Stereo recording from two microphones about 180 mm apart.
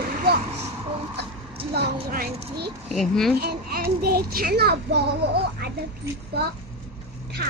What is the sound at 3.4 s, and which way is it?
A child's voice, 60° right (ahead or behind).